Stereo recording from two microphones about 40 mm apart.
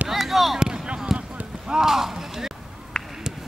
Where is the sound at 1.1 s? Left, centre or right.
Centre.